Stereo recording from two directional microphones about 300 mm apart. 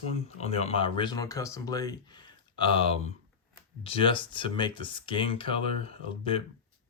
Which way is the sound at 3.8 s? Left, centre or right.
Centre.